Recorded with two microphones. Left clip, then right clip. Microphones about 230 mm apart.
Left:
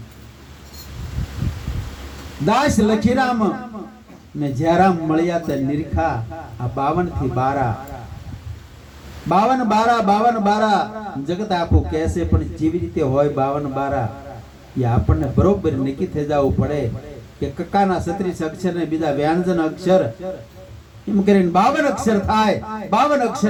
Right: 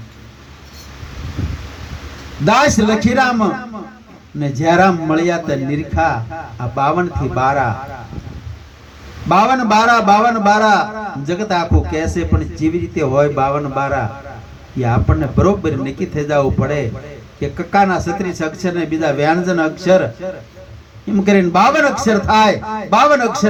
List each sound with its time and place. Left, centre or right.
2.4 s a man's voice: right
9.3 s a man's voice: right